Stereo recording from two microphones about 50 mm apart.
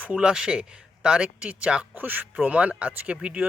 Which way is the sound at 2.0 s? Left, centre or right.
Right.